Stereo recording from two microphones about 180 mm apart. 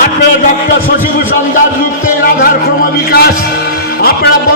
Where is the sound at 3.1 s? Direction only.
60° left (ahead or behind).